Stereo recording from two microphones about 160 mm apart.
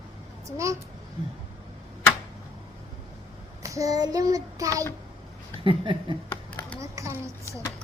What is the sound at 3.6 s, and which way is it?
Child singing, 20° right (ahead or behind).